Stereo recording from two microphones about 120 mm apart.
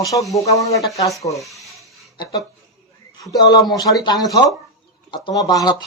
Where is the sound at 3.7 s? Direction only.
30° left (ahead or behind).